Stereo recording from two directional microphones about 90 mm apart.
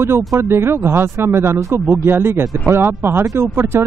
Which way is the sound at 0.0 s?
30° right (ahead or behind).